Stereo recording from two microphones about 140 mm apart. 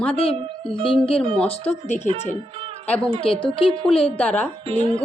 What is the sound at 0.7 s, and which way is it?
Speech, 40° left (ahead or behind).